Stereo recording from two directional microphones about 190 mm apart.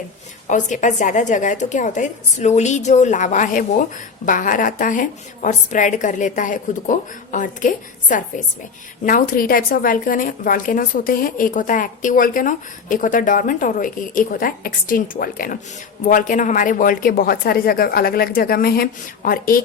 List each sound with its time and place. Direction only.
0.4 s a woman's voice: 40° left (ahead or behind)